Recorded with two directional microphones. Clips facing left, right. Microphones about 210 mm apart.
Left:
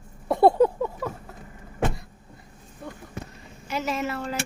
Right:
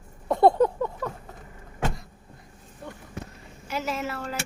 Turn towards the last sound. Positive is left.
turn(degrees=-5)  # may be behind; listen again after turning